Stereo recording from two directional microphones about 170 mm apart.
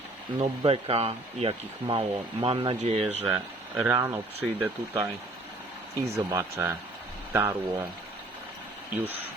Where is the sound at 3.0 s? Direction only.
10° right (ahead or behind).